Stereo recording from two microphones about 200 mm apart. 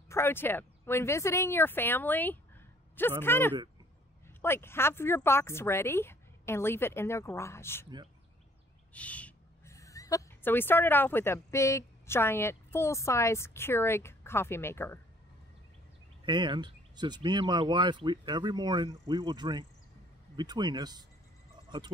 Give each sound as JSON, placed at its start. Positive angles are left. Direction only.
{"t": 0.1, "sound": "speech", "side_deg": 10}
{"t": 8.9, "sound": "a woman's voice", "side_deg": 5}
{"t": 16.3, "sound": "speech", "side_deg": -20}